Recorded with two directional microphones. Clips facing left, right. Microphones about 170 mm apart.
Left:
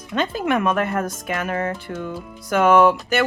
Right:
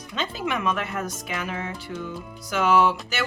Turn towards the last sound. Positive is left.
turn(degrees=55)  # may be behind; listen again after turning